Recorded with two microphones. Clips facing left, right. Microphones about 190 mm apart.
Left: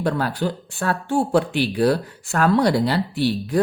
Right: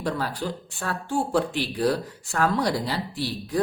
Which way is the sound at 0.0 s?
60° left (ahead or behind).